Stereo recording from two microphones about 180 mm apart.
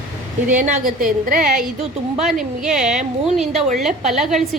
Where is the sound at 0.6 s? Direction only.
45° right (ahead or behind).